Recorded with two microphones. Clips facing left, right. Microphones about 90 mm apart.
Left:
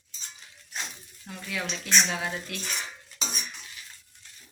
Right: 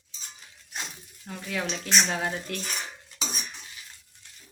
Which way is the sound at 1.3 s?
35° right (ahead or behind).